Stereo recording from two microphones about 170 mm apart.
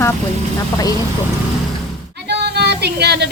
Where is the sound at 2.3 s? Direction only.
75° right (ahead or behind).